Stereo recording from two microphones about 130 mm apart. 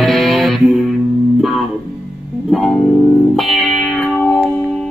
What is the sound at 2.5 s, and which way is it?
Music, centre (ahead or behind).